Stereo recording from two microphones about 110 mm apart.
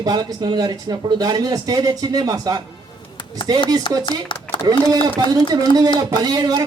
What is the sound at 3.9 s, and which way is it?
Speech, 45° left (ahead or behind).